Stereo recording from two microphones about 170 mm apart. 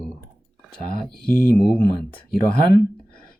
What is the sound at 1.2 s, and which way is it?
Speech, 5° left (ahead or behind).